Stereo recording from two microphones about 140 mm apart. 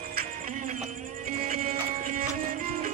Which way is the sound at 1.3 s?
70° right (ahead or behind).